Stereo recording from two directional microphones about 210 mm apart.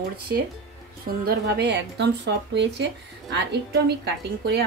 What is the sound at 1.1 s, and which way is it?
A woman's voice, 50° right (ahead or behind).